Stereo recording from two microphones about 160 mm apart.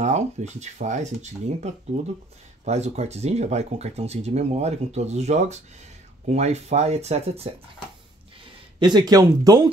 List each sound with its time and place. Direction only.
0.0 s speech: 45° right (ahead or behind)
8.7 s speech: 30° right (ahead or behind)